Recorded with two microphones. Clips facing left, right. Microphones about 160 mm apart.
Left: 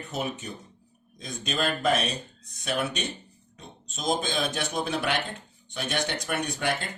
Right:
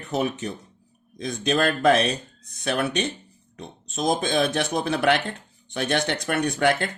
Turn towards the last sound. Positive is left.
turn(degrees=-65)  # may be behind; listen again after turning